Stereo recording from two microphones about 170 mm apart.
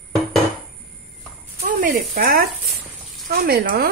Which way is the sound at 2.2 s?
60° right (ahead or behind).